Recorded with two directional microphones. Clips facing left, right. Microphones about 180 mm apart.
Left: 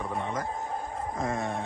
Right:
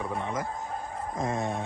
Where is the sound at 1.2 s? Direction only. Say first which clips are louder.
Right 1 dB; 20° right (ahead or behind).